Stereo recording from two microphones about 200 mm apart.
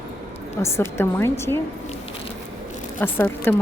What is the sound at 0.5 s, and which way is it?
Speech, 15° left (ahead or behind).